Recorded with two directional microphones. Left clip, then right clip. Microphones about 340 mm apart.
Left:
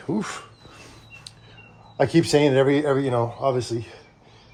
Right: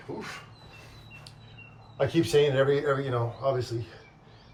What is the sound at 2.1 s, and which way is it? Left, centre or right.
Speech, centre.